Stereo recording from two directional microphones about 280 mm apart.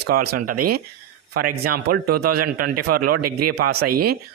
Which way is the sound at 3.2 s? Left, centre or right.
Right.